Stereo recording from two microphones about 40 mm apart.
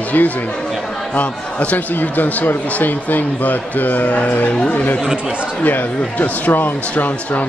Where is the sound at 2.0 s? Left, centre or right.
Left.